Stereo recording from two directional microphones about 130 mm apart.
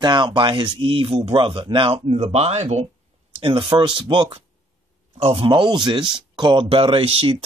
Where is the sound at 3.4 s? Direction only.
40° right (ahead or behind).